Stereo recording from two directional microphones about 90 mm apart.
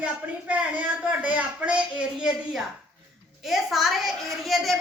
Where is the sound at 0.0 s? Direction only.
15° right (ahead or behind).